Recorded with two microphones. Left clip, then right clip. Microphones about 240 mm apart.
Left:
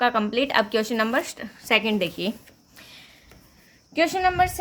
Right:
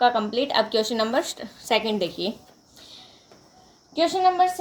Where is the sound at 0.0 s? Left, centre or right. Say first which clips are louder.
Right 2 dB; left.